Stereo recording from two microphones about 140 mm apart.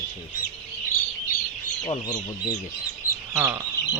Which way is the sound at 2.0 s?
25° left (ahead or behind).